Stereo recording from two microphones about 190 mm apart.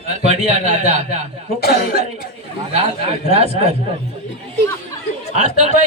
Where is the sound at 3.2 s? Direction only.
35° right (ahead or behind).